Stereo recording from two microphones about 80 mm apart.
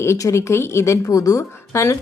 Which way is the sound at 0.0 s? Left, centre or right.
Left.